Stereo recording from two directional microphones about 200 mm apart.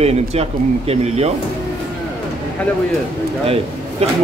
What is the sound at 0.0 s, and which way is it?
Speech, 30° right (ahead or behind).